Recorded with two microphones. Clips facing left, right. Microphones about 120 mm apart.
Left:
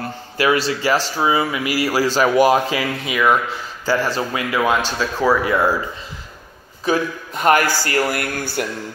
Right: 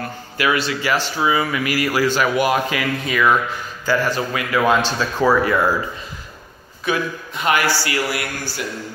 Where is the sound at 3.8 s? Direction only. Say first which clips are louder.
Even; 30° left (ahead or behind).